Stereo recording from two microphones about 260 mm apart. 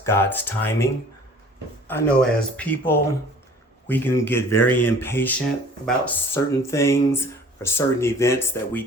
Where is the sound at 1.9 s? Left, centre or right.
Centre.